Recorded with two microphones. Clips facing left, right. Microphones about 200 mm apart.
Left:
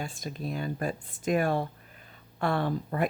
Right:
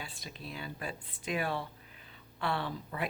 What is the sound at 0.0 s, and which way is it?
Speech, 45° left (ahead or behind).